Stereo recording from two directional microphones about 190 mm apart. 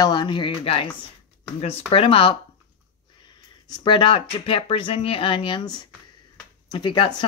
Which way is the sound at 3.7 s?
25° left (ahead or behind).